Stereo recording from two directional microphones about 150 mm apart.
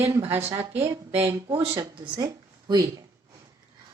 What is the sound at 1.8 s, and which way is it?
Speech, 30° right (ahead or behind).